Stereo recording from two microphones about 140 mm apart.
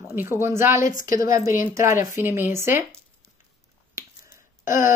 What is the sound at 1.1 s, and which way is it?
Speech, 25° right (ahead or behind).